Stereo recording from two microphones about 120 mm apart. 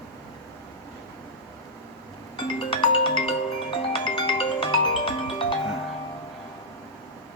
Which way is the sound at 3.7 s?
45° left (ahead or behind).